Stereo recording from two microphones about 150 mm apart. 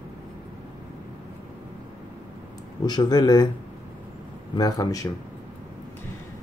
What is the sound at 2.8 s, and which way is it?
Speech, 30° left (ahead or behind).